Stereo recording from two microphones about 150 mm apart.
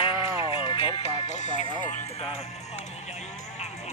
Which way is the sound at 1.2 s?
50° left (ahead or behind).